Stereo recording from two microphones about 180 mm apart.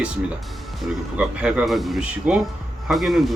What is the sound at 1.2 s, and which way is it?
Speech, 5° right (ahead or behind).